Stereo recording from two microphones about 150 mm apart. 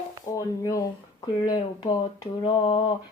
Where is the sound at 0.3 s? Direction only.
25° left (ahead or behind).